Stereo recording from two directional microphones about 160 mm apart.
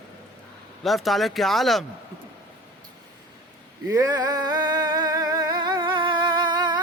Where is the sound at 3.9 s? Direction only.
25° right (ahead or behind).